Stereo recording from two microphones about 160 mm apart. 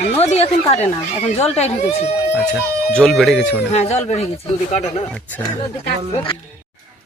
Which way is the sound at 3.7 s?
45° left (ahead or behind).